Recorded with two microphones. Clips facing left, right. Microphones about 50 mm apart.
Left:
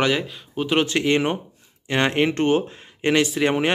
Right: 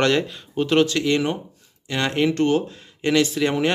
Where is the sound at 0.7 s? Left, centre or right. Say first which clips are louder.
Right 1 dB; left.